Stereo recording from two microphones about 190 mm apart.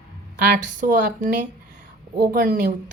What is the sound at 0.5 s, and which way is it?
Speech, 45° right (ahead or behind).